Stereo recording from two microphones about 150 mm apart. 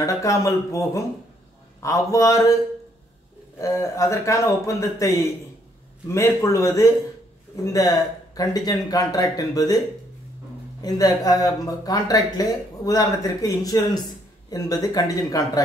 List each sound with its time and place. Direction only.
0.0 s speech: 20° left (ahead or behind)
3.5 s speech: 20° left (ahead or behind)
10.8 s speech: 25° left (ahead or behind)